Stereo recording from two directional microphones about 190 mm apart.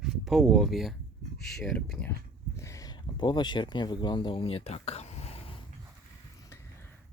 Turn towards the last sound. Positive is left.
turn(degrees=15)  # may be behind; listen again after turning